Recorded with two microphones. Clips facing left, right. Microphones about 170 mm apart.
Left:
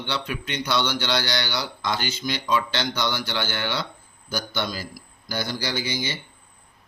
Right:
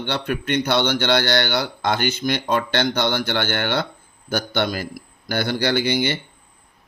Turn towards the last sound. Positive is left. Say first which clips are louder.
# right 8 dB
turn(degrees=-60)  # may be behind; listen again after turning